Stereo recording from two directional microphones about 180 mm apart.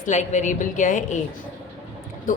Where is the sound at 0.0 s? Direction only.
40° left (ahead or behind).